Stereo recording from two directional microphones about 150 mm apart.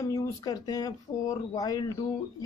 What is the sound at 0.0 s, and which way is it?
Speech, 20° left (ahead or behind).